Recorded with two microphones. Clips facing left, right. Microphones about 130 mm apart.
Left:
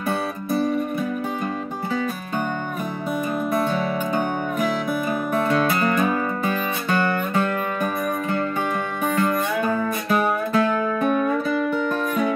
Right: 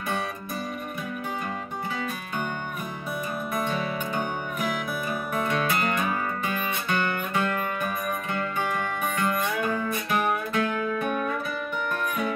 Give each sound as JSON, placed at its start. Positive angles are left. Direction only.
{"t": 3.6, "sound": "music", "side_deg": 45}